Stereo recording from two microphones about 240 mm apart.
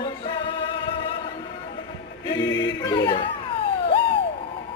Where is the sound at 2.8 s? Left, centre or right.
Centre.